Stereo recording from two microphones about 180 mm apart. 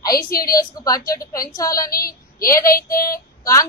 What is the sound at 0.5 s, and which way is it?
Speech, 20° left (ahead or behind).